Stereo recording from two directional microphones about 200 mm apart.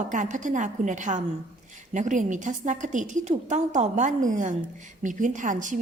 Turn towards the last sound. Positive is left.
turn(degrees=-40)  # may be behind; listen again after turning